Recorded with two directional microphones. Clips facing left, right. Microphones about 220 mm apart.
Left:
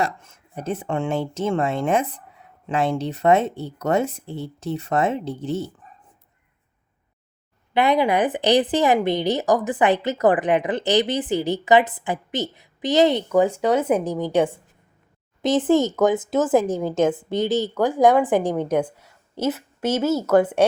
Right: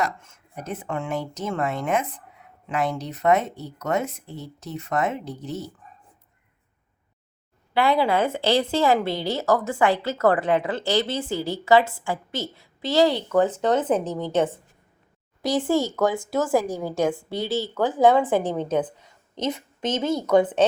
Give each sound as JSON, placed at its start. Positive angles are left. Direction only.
{"t": 0.0, "sound": "speech", "side_deg": 30}
{"t": 7.7, "sound": "speech", "side_deg": 20}